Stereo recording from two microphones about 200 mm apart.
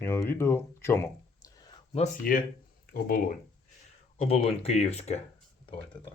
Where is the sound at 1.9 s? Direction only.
40° left (ahead or behind).